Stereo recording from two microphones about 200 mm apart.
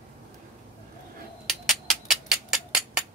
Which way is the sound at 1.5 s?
Centre (ahead or behind).